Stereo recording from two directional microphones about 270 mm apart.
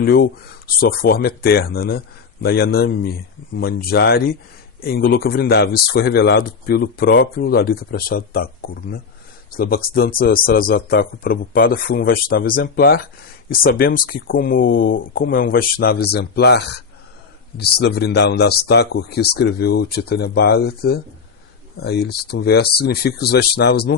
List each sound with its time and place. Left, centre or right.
0.0 s speech: left